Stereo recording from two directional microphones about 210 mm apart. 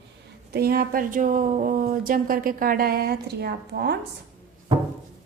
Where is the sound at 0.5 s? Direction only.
45° right (ahead or behind).